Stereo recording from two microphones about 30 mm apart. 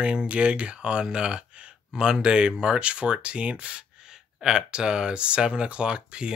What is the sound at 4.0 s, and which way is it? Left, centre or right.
Speech, right.